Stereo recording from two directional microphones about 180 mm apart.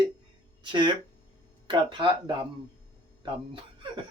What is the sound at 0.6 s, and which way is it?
Speech, 25° right (ahead or behind).